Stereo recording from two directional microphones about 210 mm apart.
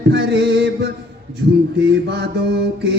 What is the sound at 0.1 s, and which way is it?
Music, 50° right (ahead or behind).